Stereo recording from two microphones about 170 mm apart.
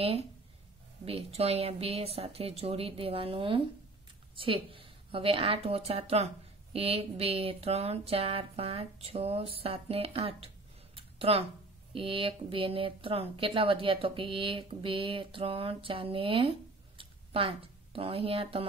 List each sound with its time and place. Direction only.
1.0 s a woman's voice: 35° right (ahead or behind)
11.0 s a sound: 35° right (ahead or behind)
11.9 s a woman's voice: 30° right (ahead or behind)